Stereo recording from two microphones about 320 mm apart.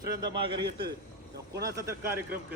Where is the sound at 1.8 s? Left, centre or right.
Centre.